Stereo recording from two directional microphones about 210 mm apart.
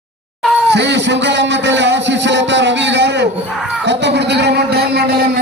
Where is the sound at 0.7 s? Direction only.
55° right (ahead or behind).